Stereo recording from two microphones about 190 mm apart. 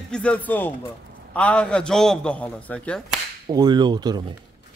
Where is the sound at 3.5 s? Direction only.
20° right (ahead or behind).